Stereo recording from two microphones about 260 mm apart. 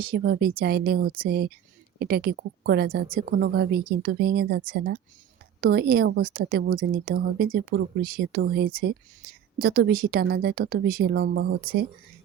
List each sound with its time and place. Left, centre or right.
0.0 s a woman's voice: right